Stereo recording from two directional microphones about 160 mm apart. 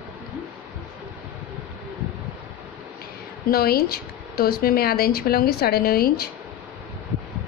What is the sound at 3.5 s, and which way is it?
Speech, 70° left (ahead or behind).